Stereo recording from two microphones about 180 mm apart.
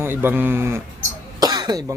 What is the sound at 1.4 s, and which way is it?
Cough, 20° right (ahead or behind).